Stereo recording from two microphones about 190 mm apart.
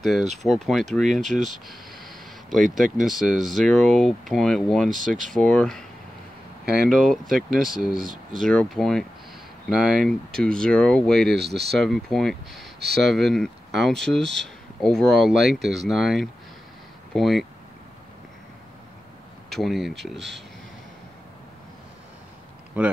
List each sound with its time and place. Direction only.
0.0 s speech: centre (ahead or behind)
1.3 s a sound: centre (ahead or behind)
2.7 s speech: centre (ahead or behind)
6.9 s speech: centre (ahead or behind)
11.3 s speech: 60° right (ahead or behind)
11.7 s speech: centre (ahead or behind)
19.5 s speech: centre (ahead or behind)
22.8 s speech: 5° right (ahead or behind)